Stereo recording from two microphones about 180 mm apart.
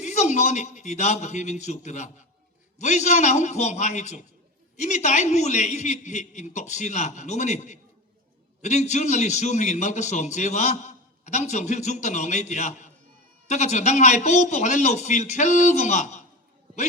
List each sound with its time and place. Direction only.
0.0 s a man's voice: 40° left (ahead or behind)